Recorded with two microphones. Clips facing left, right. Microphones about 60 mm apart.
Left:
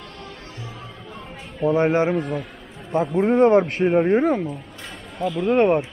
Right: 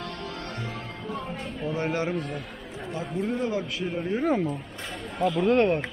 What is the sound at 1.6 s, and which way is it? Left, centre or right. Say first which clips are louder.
Speech: left 10 dB; left.